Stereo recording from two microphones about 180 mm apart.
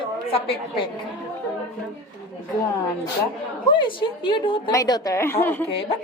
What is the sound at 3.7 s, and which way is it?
A woman's voice, 25° left (ahead or behind).